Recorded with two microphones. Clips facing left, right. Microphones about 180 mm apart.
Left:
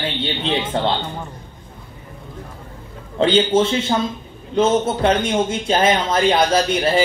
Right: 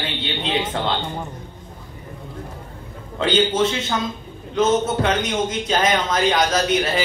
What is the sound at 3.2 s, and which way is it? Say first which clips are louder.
A man's voice: left 3 dB; 30° left (ahead or behind).